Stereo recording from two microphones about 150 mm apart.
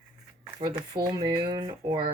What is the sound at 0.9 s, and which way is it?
Speech, 25° right (ahead or behind).